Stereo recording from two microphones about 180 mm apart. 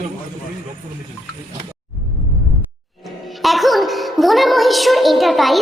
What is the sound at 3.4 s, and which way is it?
A woman's voice, centre (ahead or behind).